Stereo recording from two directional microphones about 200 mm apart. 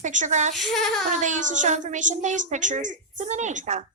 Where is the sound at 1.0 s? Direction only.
40° right (ahead or behind).